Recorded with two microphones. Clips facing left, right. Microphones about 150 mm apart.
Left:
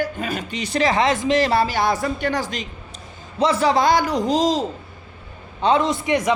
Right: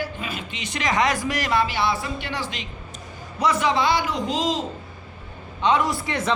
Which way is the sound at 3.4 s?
30° left (ahead or behind).